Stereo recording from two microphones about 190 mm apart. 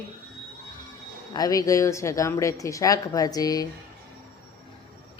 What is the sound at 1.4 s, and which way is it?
Speech, 20° left (ahead or behind).